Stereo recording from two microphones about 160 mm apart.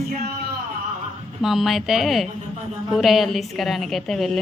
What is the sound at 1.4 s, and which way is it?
A woman's voice, centre (ahead or behind).